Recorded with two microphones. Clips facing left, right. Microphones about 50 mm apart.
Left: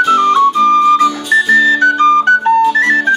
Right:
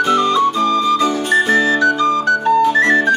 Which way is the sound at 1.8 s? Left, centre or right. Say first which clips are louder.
Left 5 dB; left.